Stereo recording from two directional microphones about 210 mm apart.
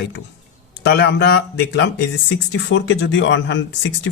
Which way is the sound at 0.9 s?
55° left (ahead or behind).